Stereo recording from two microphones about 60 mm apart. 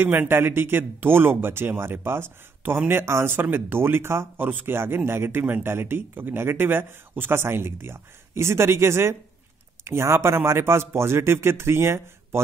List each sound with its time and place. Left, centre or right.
0.0 s speech: right
4.5 s speech: right